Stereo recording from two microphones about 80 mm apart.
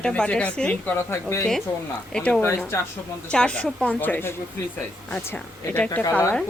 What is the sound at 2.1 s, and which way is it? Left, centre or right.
A woman's voice, centre.